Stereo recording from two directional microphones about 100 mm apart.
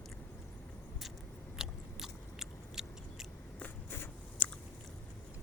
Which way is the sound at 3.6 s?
20° left (ahead or behind).